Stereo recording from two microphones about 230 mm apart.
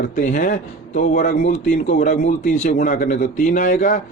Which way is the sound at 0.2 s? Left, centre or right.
Left.